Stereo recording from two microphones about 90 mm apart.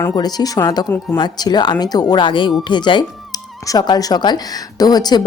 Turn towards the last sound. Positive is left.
turn(degrees=50)  # may be behind; listen again after turning